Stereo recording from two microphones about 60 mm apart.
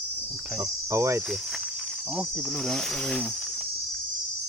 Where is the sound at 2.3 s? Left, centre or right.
Centre.